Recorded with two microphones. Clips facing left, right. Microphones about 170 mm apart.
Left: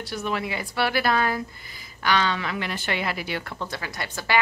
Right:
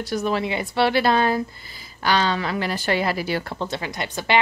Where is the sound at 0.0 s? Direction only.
40° right (ahead or behind).